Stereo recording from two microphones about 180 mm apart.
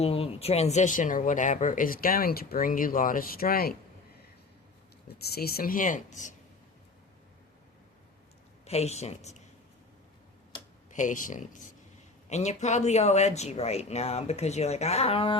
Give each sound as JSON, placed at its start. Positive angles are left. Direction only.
{"t": 0.0, "sound": "speech", "side_deg": 35}
{"t": 5.0, "sound": "speech", "side_deg": 60}
{"t": 8.6, "sound": "speech", "side_deg": 35}
{"t": 10.9, "sound": "speech", "side_deg": 45}